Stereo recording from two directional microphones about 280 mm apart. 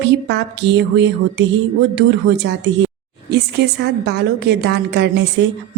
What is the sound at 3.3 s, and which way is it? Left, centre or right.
Speech, right.